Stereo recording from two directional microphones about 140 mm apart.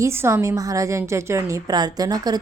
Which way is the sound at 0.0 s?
20° right (ahead or behind).